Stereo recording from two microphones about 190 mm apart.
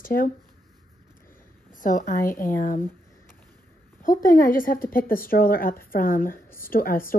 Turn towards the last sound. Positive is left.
turn(degrees=10)  # may be behind; listen again after turning